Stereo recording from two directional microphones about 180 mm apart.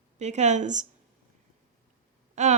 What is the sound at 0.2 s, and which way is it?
Speech, 40° right (ahead or behind).